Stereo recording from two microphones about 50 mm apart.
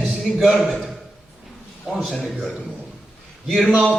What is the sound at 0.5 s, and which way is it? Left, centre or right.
Speech, centre.